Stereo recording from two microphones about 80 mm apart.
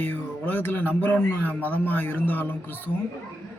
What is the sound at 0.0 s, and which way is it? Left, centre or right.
Speech, left.